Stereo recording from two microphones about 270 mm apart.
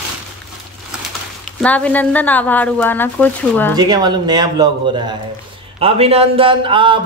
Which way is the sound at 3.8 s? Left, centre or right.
Centre.